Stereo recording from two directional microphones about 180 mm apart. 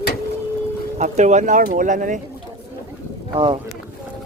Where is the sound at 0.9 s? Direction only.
40° right (ahead or behind).